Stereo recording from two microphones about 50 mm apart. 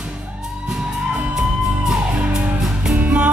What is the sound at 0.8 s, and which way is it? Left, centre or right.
Music, centre.